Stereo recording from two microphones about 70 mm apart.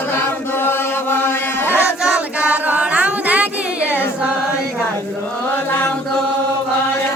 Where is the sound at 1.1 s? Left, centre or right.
Left.